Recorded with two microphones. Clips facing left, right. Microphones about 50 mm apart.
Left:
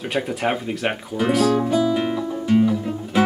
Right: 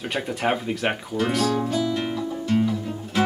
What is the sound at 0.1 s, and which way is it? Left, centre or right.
Speech, centre.